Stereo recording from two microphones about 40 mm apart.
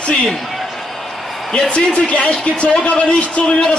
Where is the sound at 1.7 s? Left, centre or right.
Left.